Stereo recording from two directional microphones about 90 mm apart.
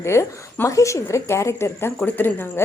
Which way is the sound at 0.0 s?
30° left (ahead or behind).